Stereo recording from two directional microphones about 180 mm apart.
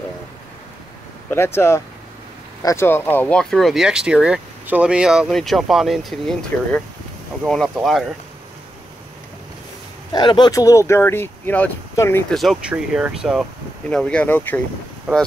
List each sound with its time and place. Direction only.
1.3 s speech: 15° left (ahead or behind)
10.1 s speech: 25° left (ahead or behind)
12.4 s speech: 5° right (ahead or behind)
13.8 s speech: 5° left (ahead or behind)